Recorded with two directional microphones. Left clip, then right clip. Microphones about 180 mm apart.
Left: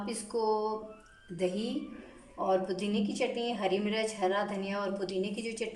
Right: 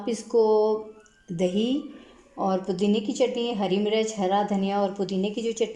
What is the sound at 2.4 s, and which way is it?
Speech, 40° right (ahead or behind).